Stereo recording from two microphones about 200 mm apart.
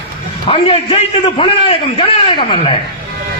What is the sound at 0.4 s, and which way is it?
A man's voice, 25° left (ahead or behind).